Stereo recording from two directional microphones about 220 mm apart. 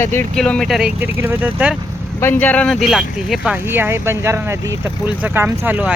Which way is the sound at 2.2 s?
10° left (ahead or behind).